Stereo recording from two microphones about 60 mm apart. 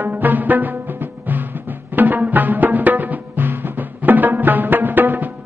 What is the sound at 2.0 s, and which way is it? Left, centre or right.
Music, right.